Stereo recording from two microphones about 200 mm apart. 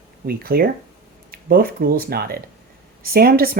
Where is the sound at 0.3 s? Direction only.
50° right (ahead or behind).